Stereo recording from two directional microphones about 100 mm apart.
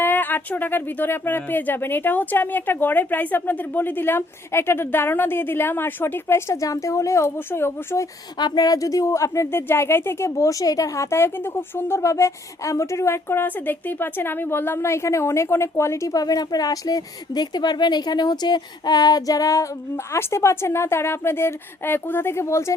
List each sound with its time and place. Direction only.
0.0 s speech: 20° left (ahead or behind)
8.4 s speech: 45° left (ahead or behind); by 22.7 s 30° left (ahead or behind)